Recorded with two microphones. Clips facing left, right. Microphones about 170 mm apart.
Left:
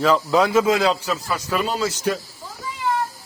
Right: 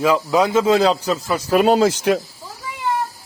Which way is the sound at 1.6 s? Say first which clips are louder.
Right 8 dB; 65° right (ahead or behind).